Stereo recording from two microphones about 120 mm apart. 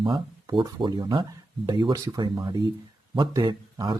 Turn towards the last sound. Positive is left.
turn(degrees=-35)  # may be behind; listen again after turning